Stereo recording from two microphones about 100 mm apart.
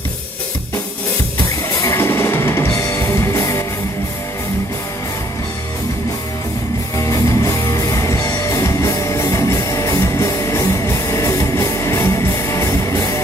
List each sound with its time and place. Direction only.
1.7 s music: 30° left (ahead or behind)
7.0 s music: 30° left (ahead or behind)